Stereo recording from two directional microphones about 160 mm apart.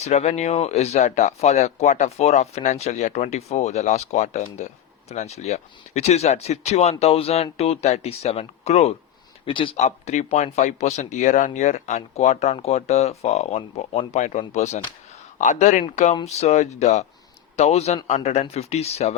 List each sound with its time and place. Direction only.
0.0 s speech: 45° left (ahead or behind)